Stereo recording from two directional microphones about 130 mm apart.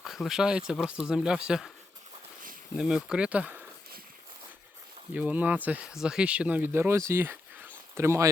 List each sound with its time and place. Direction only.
0.0 s speech: 5° right (ahead or behind)
2.7 s speech: 5° right (ahead or behind)
5.1 s speech: 10° right (ahead or behind)